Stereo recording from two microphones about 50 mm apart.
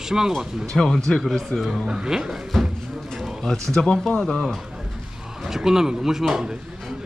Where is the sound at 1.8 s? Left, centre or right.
Centre.